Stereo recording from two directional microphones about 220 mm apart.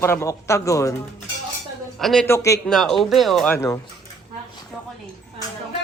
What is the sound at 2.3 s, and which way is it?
Speech, 15° left (ahead or behind).